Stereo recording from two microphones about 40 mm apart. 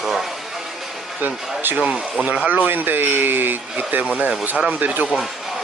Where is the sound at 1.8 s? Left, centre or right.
Right.